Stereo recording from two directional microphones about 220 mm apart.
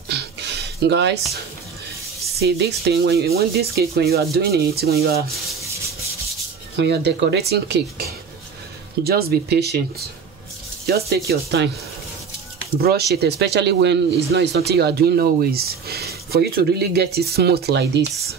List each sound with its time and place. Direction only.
0.1 s a sound: 50° right (ahead or behind)
2.4 s speech: 45° right (ahead or behind)
6.8 s speech: 50° right (ahead or behind)
12.8 s speech: 45° right (ahead or behind)